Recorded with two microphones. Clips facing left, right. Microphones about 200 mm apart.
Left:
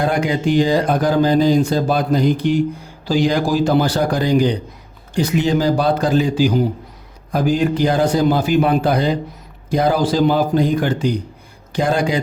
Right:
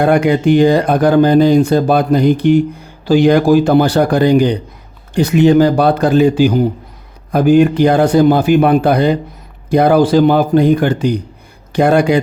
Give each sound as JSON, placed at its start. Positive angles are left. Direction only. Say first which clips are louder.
{"t": 0.0, "sound": "speech", "louder": "right 7 dB", "side_deg": -60}